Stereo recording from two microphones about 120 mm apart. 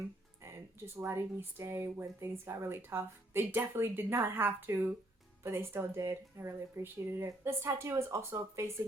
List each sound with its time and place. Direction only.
0.9 s speech: 20° right (ahead or behind)